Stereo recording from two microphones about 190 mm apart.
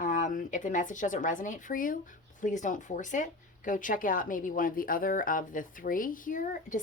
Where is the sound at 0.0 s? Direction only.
45° left (ahead or behind).